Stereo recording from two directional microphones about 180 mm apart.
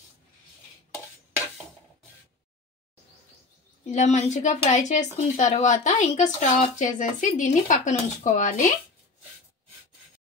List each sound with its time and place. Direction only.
3.8 s speech: 40° left (ahead or behind)